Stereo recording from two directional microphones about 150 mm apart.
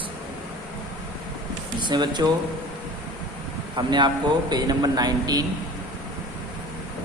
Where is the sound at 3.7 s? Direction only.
30° right (ahead or behind).